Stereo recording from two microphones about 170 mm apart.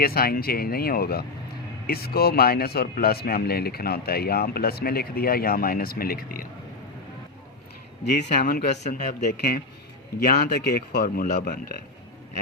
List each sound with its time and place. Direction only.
0.0 s speech: 65° left (ahead or behind)
8.1 s speech: 50° left (ahead or behind)
10.2 s speech: 65° left (ahead or behind)